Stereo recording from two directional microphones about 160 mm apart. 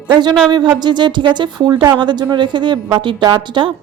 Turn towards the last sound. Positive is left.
turn(degrees=-30)  # may be behind; listen again after turning